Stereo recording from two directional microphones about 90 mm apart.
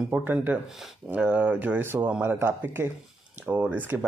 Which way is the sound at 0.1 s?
20° right (ahead or behind).